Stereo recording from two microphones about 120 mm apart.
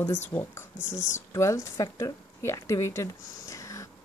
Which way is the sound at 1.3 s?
25° left (ahead or behind).